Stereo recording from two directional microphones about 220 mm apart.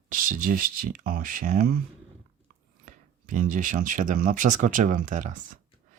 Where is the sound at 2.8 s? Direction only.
35° right (ahead or behind).